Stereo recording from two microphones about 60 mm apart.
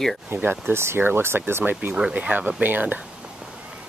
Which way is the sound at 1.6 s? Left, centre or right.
Right.